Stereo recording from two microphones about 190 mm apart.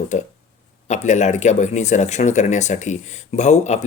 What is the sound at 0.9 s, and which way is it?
Speech, 40° left (ahead or behind).